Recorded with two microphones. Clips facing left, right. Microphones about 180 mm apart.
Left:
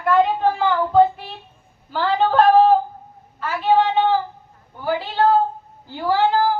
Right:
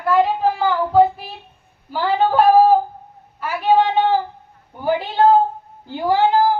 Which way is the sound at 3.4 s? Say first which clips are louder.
Right 1 dB; 15° right (ahead or behind).